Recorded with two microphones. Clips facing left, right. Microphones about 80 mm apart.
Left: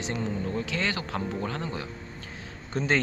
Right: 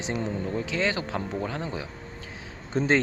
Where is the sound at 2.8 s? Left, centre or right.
Right.